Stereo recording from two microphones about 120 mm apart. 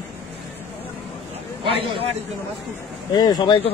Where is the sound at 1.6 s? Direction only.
50° right (ahead or behind).